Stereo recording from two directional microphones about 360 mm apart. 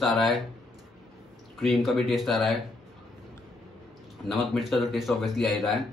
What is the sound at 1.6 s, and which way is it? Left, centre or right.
Speech, centre.